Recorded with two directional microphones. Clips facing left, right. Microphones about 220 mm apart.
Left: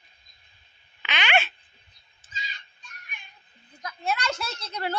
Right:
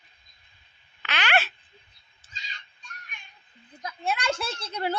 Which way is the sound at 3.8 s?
30° right (ahead or behind).